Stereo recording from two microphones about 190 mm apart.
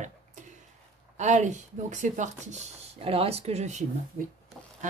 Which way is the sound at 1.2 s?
40° right (ahead or behind).